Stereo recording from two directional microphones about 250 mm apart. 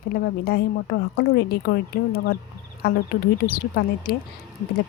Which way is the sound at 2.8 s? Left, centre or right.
Left.